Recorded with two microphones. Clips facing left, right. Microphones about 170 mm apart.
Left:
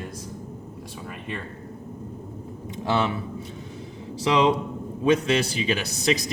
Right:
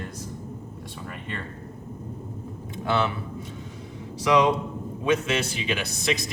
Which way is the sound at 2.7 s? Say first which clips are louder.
Left 1 dB; 25° left (ahead or behind).